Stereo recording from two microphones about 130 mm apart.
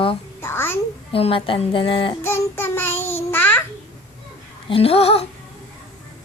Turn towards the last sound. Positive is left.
turn(degrees=50)  # may be behind; listen again after turning